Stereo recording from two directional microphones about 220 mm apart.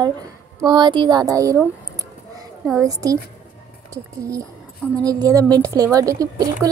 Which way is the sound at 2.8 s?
15° right (ahead or behind).